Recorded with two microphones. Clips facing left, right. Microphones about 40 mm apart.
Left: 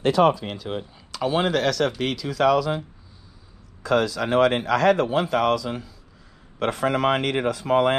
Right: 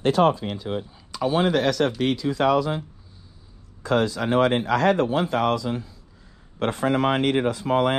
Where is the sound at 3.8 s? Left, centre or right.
Left.